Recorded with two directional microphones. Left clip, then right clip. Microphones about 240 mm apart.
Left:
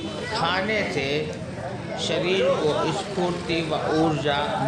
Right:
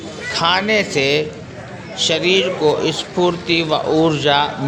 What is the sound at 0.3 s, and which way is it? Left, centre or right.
A man's voice, right.